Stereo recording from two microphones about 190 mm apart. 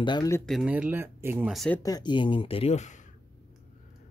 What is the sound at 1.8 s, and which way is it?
Speech, 20° left (ahead or behind).